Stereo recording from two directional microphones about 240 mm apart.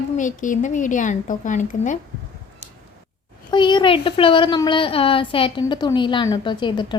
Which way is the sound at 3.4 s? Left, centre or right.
Centre.